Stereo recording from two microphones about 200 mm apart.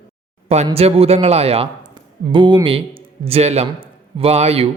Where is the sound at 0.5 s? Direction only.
30° right (ahead or behind).